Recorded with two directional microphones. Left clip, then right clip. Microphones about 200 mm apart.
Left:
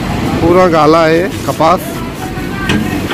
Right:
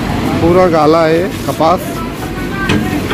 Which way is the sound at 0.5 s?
5° left (ahead or behind).